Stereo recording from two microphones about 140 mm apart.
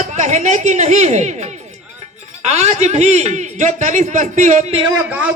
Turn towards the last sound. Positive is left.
turn(degrees=-10)  # may be behind; listen again after turning